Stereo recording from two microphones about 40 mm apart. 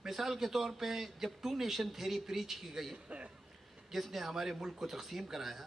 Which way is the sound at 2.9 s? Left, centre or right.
Right.